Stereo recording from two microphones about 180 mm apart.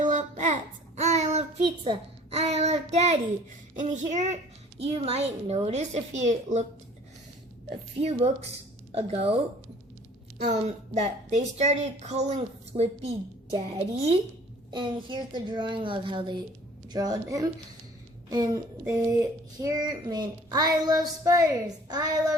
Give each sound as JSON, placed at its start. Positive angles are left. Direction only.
{"t": 0.0, "sound": "child singing", "side_deg": -45}
{"t": 3.8, "sound": "a woman's voice", "side_deg": -40}
{"t": 7.7, "sound": "a woman's voice", "side_deg": -35}
{"t": 10.4, "sound": "a woman's voice", "side_deg": -40}